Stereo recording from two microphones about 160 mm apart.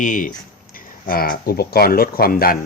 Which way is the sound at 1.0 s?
65° left (ahead or behind).